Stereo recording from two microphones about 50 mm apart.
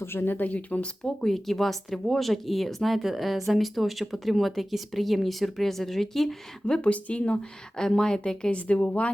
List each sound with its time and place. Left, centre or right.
0.0 s speech: left
0.5 s speech: left
1.0 s speech: centre
6.7 s speech: left
7.8 s a woman's voice: centre
8.5 s speech: left